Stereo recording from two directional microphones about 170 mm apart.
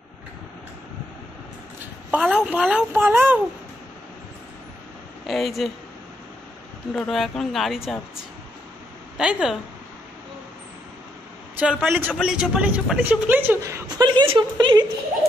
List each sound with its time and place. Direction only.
1.8 s a woman's voice: 5° right (ahead or behind)
5.2 s speech: centre (ahead or behind)
6.9 s speech: 5° left (ahead or behind)
9.2 s speech: 5° right (ahead or behind)
11.6 s a man's voice: 5° right (ahead or behind)
13.8 s speech: 25° right (ahead or behind)